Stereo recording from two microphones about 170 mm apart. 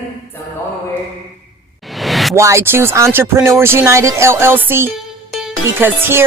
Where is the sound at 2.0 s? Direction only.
Centre (ahead or behind).